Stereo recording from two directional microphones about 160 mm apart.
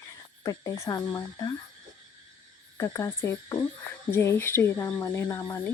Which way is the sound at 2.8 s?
20° left (ahead or behind).